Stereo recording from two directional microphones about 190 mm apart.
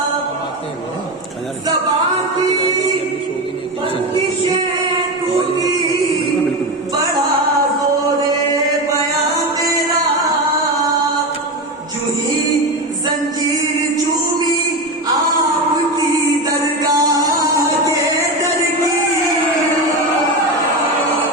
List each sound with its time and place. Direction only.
16.8 s music: 20° right (ahead or behind)